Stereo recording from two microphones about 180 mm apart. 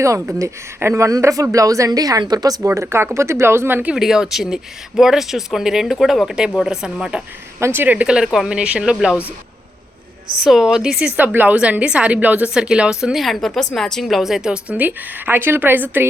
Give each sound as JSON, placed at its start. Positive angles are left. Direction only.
{"t": 0.0, "sound": "a woman's voice", "side_deg": -15}
{"t": 10.4, "sound": "a woman's voice", "side_deg": 0}